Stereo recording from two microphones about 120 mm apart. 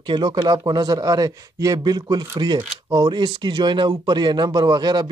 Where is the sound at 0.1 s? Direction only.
40° right (ahead or behind).